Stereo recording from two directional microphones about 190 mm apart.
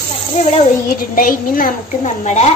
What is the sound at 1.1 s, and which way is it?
A woman's voice, 45° left (ahead or behind).